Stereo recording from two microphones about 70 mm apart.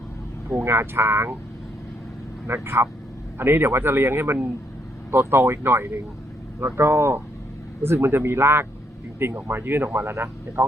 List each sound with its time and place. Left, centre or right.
0.6 s speech: right
2.5 s speech: right